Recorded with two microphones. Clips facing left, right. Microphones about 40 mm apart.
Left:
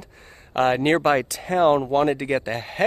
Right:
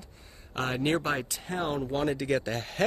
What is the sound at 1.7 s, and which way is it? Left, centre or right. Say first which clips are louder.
Speech: left 10 dB; left.